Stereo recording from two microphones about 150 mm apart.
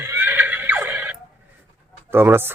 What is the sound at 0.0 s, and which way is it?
Neigh, 15° right (ahead or behind).